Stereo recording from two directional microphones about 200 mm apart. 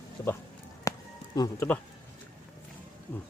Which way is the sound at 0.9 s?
15° left (ahead or behind).